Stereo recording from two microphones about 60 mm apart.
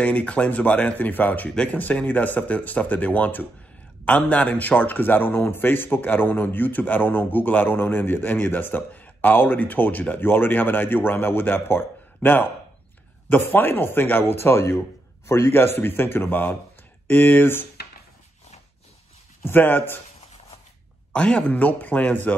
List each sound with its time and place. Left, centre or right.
0.0 s speech: left
1.5 s speech: centre
1.8 s speech: left
19.4 s speech: left
21.1 s speech: centre